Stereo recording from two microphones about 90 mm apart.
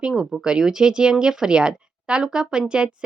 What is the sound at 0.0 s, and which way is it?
Speech, 5° right (ahead or behind).